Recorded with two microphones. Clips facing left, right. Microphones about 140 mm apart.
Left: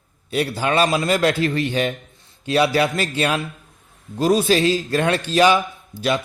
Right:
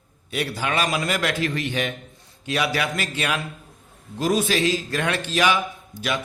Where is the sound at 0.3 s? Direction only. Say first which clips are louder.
Left 5 dB; 35° left (ahead or behind).